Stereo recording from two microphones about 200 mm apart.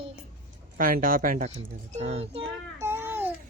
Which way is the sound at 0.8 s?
45° right (ahead or behind).